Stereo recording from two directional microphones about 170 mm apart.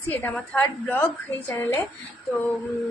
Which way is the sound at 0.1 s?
10° left (ahead or behind).